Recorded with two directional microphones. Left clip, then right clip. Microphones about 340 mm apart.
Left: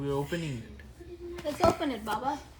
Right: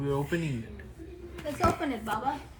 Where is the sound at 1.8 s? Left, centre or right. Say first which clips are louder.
Right 1 dB; left.